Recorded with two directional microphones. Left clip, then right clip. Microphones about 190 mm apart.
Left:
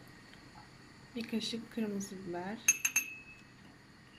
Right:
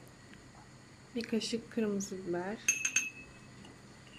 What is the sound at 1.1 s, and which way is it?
Speech, centre (ahead or behind).